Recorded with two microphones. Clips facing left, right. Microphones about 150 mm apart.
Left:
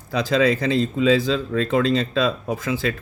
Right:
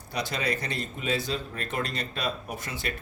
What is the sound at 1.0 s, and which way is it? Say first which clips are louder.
Speech: left 10 dB; 90° left.